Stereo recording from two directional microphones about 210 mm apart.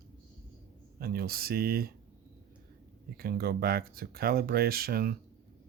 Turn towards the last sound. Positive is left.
turn(degrees=-45)  # may be behind; listen again after turning